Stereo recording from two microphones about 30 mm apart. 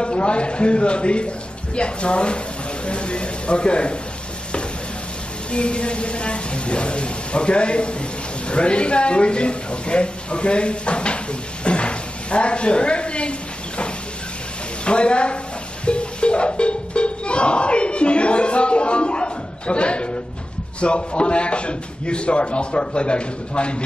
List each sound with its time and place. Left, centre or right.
0.0 s a man's voice: left
5.5 s a man's voice: left
11.6 s a sound: left
14.9 s a man's voice: left
15.8 s music: left
20.8 s a man's voice: left